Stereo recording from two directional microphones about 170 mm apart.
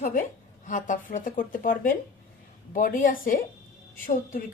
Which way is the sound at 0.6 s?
50° left (ahead or behind).